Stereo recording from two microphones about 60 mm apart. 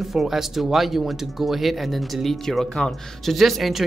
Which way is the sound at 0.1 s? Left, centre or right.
Centre.